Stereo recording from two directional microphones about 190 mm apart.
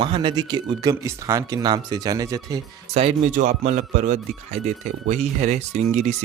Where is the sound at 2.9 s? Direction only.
35° right (ahead or behind).